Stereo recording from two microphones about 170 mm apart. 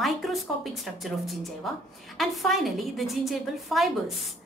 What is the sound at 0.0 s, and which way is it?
Speech, centre (ahead or behind).